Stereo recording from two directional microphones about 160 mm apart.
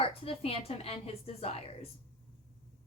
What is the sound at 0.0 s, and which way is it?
Speech, 35° left (ahead or behind).